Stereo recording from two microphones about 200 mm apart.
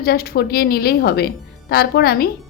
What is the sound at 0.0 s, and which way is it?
A woman's voice, 50° left (ahead or behind).